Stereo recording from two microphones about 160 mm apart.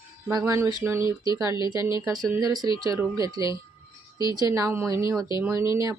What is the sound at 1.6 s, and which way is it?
Speech, 20° right (ahead or behind).